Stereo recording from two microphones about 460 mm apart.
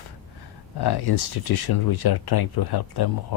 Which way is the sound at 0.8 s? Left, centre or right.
Left.